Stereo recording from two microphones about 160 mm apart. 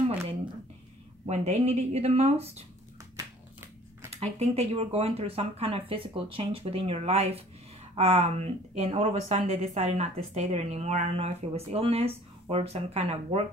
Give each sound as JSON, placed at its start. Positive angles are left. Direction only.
{"t": 1.2, "sound": "speech", "side_deg": -45}
{"t": 4.2, "sound": "speech", "side_deg": -40}